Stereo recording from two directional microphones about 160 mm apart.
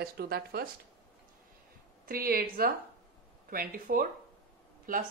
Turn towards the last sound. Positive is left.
turn(degrees=-60)  # may be behind; listen again after turning